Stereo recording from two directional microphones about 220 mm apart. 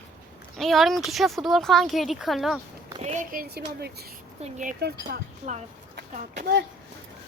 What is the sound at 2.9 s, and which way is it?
Speech, 30° right (ahead or behind).